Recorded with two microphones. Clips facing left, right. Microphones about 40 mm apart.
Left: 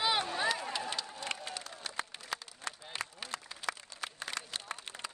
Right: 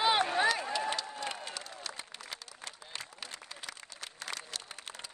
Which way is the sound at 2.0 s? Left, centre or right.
Left.